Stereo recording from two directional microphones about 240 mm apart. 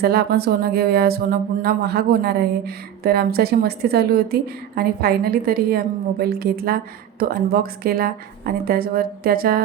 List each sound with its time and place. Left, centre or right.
0.0 s speech: right